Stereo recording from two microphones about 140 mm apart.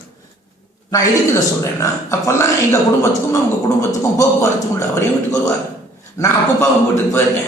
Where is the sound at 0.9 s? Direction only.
25° left (ahead or behind).